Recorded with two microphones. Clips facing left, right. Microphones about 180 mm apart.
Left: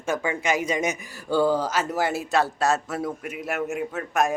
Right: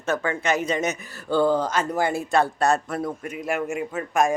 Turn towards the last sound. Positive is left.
turn(degrees=0)  # may be behind; listen again after turning